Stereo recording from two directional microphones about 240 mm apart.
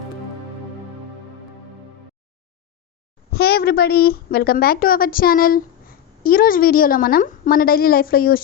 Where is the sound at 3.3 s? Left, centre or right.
Left.